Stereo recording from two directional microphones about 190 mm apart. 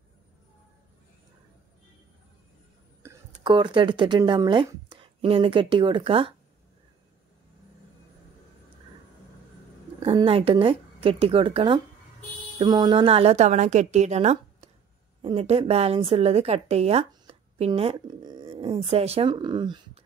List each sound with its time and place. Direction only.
3.4 s speech: 25° right (ahead or behind)
10.1 s a woman's voice: 30° right (ahead or behind)